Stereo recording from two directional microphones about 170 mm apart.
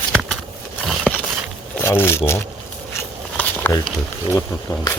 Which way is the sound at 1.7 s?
15° left (ahead or behind).